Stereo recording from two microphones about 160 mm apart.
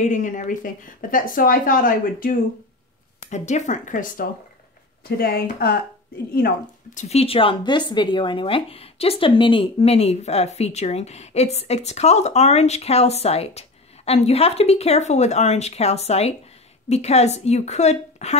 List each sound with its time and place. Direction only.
0.0 s speech: 55° left (ahead or behind)
3.3 s a woman's voice: 45° left (ahead or behind)
5.0 s speech: 70° left (ahead or behind)
6.9 s a woman's voice: 45° left (ahead or behind)